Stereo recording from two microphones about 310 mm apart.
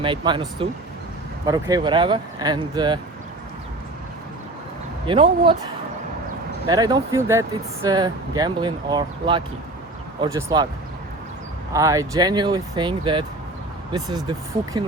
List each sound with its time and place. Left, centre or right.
0.0 s speech: centre
5.0 s speech: centre
6.7 s speech: centre
11.7 s speech: centre